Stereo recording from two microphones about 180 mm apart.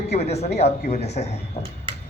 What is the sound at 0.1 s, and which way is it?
Speech, 35° left (ahead or behind).